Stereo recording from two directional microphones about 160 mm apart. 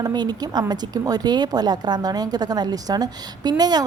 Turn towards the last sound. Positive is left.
turn(degrees=-25)  # may be behind; listen again after turning